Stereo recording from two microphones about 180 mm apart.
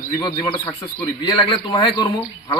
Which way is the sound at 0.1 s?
25° left (ahead or behind).